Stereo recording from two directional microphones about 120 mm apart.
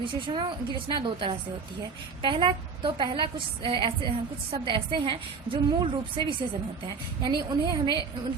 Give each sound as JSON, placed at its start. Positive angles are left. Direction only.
{"t": 0.0, "sound": "a woman's voice", "side_deg": -40}